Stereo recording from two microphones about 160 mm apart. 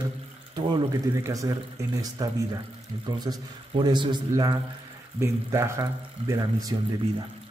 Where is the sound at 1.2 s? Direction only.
20° right (ahead or behind).